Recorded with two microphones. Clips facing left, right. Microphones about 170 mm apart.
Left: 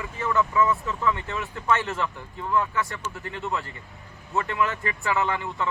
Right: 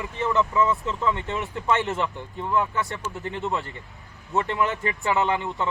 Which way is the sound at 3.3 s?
20° right (ahead or behind).